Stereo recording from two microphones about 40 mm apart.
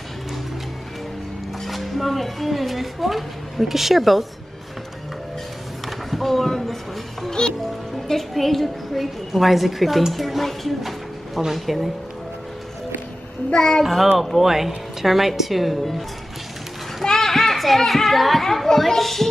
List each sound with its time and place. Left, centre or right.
1.6 s a woman's voice: centre
5.9 s a sound: centre
7.2 s a child's voice: centre
13.5 s a child's voice: centre
14.1 s a woman's voice: centre
17.0 s a child's voice: centre